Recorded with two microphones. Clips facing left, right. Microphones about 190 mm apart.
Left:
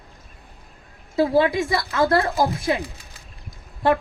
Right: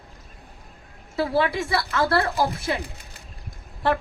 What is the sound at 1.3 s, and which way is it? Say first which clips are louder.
A woman's voice: left 2 dB; 15° left (ahead or behind).